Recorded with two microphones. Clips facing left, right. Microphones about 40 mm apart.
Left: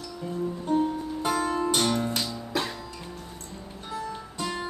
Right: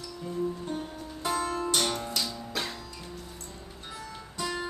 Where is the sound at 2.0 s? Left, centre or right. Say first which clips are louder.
Left 5 dB; left.